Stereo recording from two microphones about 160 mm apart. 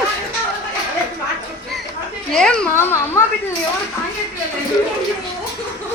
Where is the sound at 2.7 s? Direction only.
15° left (ahead or behind).